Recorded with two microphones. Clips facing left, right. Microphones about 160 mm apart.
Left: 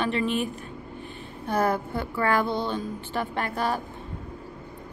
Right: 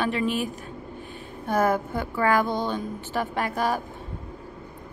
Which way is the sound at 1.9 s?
15° right (ahead or behind).